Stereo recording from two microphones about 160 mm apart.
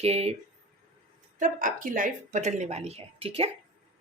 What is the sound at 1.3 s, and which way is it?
Speech, 55° right (ahead or behind).